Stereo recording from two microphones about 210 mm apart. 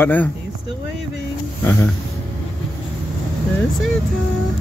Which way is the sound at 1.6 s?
10° left (ahead or behind).